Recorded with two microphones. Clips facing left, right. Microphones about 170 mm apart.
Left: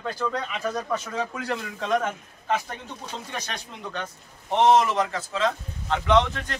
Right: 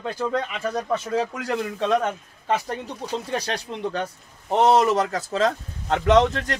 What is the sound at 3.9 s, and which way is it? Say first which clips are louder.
Speech: right 6 dB; 35° right (ahead or behind).